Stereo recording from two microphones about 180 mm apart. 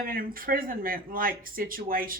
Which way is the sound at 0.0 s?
50° right (ahead or behind).